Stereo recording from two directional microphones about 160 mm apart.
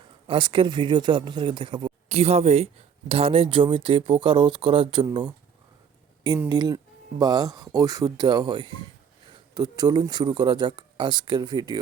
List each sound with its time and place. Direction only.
0.3 s speech: 30° right (ahead or behind)
6.5 s speech: 25° right (ahead or behind)